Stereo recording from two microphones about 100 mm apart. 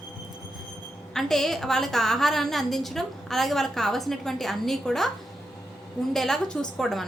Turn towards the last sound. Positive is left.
turn(degrees=5)  # may be behind; listen again after turning